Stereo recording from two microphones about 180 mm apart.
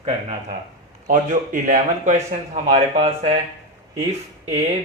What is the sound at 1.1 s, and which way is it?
A man's voice, 45° right (ahead or behind).